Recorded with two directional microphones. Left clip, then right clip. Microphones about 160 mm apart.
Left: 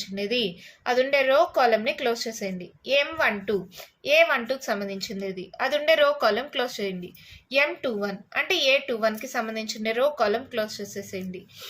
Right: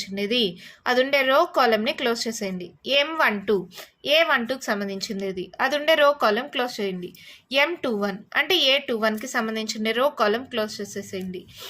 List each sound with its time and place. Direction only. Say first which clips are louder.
0.0 s a woman's voice: right 3 dB; 30° right (ahead or behind)